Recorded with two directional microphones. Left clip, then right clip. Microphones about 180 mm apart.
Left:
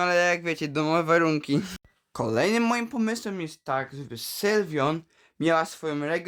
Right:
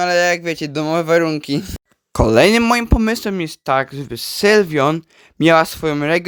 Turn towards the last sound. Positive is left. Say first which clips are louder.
# right 11 dB
turn(degrees=-45)  # may be behind; listen again after turning